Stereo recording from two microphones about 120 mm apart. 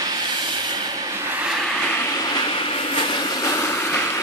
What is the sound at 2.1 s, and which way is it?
Vehicle, 35° left (ahead or behind).